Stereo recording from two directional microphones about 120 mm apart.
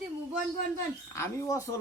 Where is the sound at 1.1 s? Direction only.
25° left (ahead or behind).